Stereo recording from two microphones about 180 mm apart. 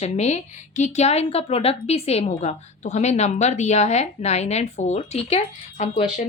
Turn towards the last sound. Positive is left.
turn(degrees=35)  # may be behind; listen again after turning